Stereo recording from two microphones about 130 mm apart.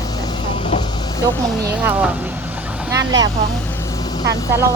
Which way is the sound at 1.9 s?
10° right (ahead or behind).